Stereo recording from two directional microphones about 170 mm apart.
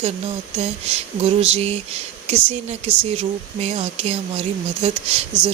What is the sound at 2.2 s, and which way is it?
Speech, 40° right (ahead or behind).